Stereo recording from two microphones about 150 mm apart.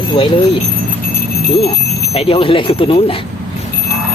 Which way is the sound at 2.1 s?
40° left (ahead or behind).